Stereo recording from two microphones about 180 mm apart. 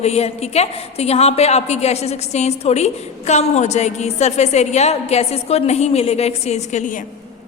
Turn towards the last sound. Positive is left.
turn(degrees=45)  # may be behind; listen again after turning